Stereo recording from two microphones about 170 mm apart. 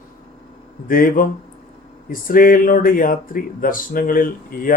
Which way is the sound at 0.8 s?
55° left (ahead or behind).